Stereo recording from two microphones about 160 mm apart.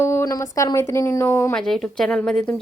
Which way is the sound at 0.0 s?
15° left (ahead or behind).